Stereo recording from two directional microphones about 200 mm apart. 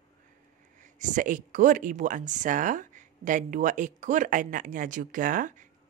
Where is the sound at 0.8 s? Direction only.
40° right (ahead or behind).